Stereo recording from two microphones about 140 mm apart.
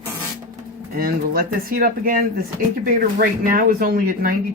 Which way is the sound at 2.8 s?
80° right.